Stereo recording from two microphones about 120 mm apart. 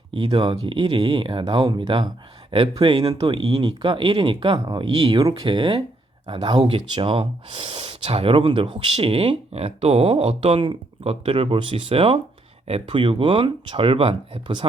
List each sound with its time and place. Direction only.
0.1 s speech: 40° right (ahead or behind)